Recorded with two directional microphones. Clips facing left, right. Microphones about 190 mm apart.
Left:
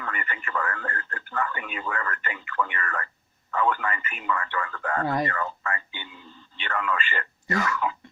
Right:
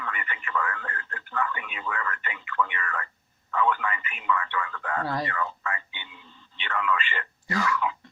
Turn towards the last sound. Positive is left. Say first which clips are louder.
# left 1 dB
turn(degrees=45)  # may be behind; listen again after turning